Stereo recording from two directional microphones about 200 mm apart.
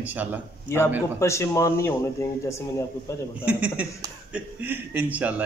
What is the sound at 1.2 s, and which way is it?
A man's voice, 15° left (ahead or behind).